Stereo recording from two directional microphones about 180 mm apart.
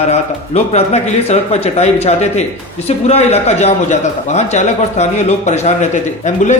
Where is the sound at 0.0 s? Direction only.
35° left (ahead or behind).